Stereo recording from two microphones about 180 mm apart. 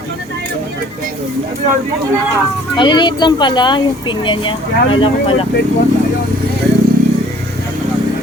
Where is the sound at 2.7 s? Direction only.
25° left (ahead or behind).